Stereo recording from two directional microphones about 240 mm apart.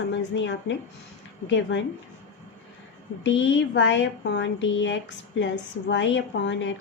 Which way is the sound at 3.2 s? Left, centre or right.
Left.